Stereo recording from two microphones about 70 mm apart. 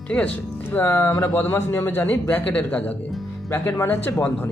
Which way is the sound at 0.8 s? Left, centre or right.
Left.